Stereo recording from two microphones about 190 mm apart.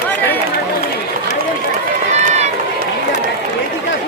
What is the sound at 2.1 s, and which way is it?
Run, 35° right (ahead or behind).